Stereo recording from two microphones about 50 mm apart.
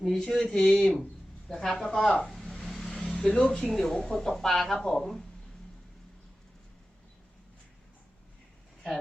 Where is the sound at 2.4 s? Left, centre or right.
Centre.